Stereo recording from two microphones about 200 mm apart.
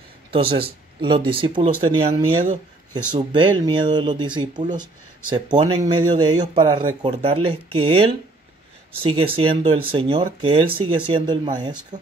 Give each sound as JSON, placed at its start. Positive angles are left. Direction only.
{"t": 0.3, "sound": "speech", "side_deg": -25}
{"t": 11.9, "sound": "speech", "side_deg": -35}